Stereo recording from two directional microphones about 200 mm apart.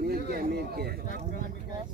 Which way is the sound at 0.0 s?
50° right (ahead or behind).